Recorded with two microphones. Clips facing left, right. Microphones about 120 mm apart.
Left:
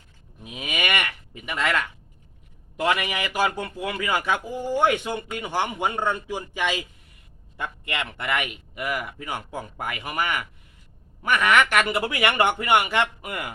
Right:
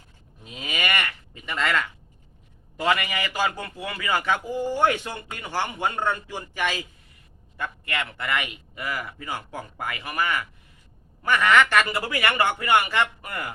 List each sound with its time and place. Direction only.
0.4 s livestock: 15° left (ahead or behind)
1.5 s a man's voice: 15° left (ahead or behind)